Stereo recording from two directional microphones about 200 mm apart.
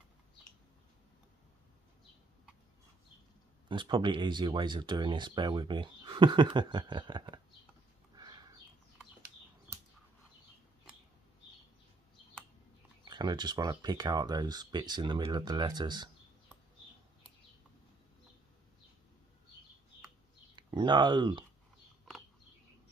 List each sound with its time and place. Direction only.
3.6 s speech: 25° right (ahead or behind)
8.2 s a sound: 20° right (ahead or behind)
13.1 s speech: 20° right (ahead or behind)
20.5 s speech: 25° right (ahead or behind)